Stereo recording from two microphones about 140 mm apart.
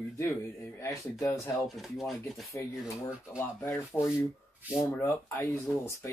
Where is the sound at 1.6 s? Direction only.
Centre (ahead or behind).